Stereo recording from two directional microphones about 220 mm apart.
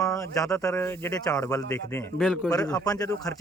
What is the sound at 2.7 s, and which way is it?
Speech, 15° left (ahead or behind).